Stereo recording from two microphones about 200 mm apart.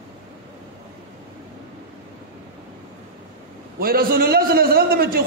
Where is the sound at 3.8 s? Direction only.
45° right (ahead or behind).